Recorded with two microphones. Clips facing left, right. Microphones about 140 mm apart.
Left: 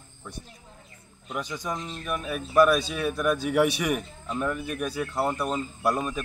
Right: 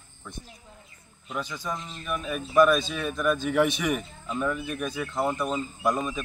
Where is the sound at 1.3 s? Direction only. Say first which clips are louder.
Left 1 dB; 15° left (ahead or behind).